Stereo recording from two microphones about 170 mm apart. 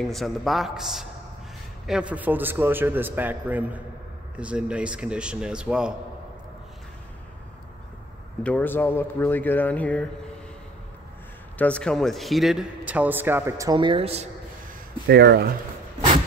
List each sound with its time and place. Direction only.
0.0 s a man's voice: centre (ahead or behind)
8.5 s speech: 10° left (ahead or behind)
11.5 s a man's voice: 5° left (ahead or behind); by 14.3 s 35° right (ahead or behind)
15.0 s speech: 70° right (ahead or behind)